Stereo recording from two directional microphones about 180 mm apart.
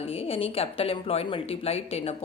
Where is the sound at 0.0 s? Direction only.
35° left (ahead or behind).